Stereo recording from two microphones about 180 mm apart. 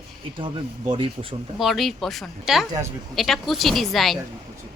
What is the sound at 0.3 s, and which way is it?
Speech, 25° right (ahead or behind).